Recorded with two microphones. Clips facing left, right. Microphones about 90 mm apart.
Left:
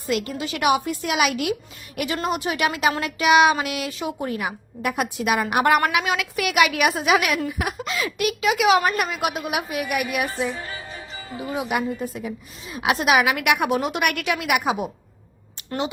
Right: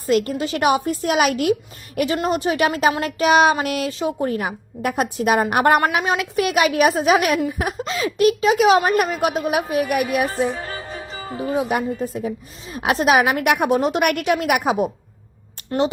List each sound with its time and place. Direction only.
0.1 s a woman's voice: 40° right (ahead or behind)